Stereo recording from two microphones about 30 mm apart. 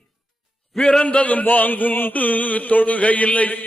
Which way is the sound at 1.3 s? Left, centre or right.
Left.